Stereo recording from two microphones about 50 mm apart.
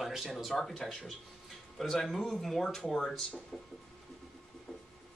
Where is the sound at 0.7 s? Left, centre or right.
Centre.